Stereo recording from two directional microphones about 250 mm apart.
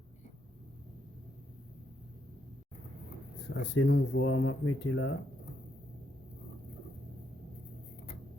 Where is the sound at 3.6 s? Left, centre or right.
Left.